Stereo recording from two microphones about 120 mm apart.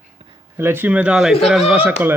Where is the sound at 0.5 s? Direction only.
20° right (ahead or behind); by 1.7 s centre (ahead or behind).